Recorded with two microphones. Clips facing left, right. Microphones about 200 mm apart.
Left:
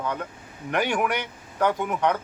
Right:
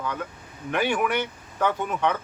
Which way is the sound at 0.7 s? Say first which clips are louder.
Even; 15° left (ahead or behind).